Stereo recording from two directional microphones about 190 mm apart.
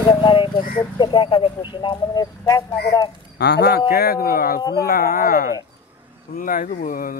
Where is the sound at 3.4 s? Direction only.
60° left (ahead or behind).